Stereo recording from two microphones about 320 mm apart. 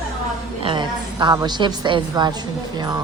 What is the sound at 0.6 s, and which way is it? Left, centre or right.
A woman's voice, centre.